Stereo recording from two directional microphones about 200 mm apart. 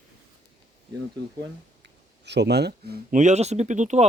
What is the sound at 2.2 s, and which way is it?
Speech, 60° right (ahead or behind).